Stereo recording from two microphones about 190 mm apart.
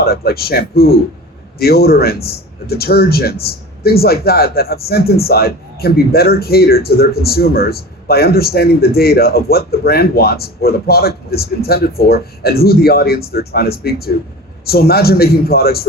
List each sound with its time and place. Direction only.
0.0 s speech: 55° left (ahead or behind)